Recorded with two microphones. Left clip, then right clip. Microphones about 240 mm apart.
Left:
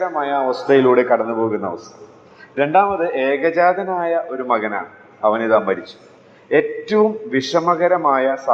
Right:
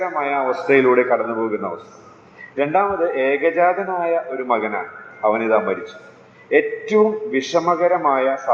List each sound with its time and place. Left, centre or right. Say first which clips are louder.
0.0 s a man's voice: left 1 dB; left